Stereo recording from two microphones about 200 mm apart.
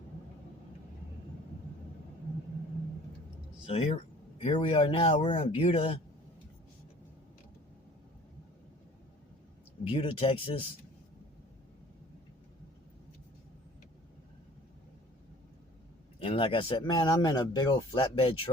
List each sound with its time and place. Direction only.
3.7 s speech: 30° left (ahead or behind)
9.9 s speech: 30° left (ahead or behind)
16.2 s speech: 25° left (ahead or behind)